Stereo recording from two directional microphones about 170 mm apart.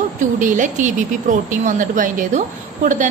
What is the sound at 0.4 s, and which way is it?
A woman's voice, 50° right (ahead or behind).